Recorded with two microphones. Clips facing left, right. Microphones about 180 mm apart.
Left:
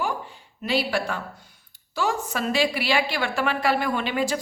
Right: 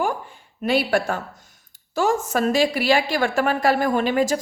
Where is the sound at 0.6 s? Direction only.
50° right (ahead or behind).